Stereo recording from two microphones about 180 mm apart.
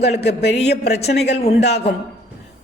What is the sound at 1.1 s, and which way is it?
Speech, 65° left (ahead or behind).